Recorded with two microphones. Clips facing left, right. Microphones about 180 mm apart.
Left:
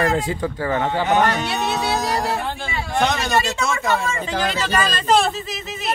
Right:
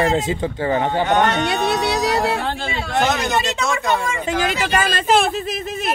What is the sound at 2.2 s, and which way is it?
Music, 70° right (ahead or behind).